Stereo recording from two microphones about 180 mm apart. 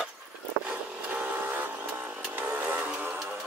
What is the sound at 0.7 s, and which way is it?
Vehicle, 10° right (ahead or behind).